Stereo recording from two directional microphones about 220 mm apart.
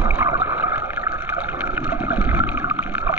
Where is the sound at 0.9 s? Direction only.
45° left (ahead or behind).